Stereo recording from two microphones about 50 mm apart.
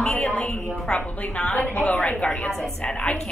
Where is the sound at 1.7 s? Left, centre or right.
Left.